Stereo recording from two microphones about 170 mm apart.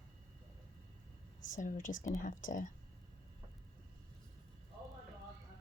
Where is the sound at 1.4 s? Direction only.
50° left (ahead or behind).